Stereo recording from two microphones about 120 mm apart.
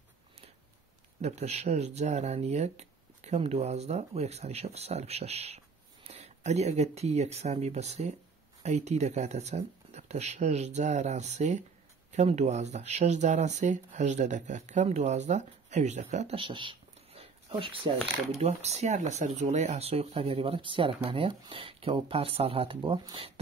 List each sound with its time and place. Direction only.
1.2 s speech: 65° right (ahead or behind)
16.3 s a sound: 45° right (ahead or behind)
18.4 s speech: 60° right (ahead or behind)